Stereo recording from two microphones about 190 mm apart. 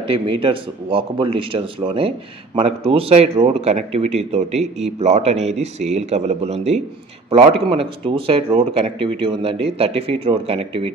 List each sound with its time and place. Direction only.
0.0 s speech: 30° right (ahead or behind)